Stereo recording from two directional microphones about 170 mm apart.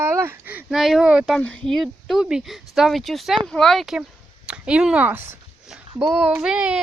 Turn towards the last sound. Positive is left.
turn(degrees=-5)  # may be behind; listen again after turning